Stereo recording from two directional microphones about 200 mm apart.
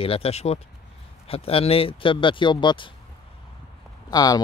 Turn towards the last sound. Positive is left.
turn(degrees=20)  # may be behind; listen again after turning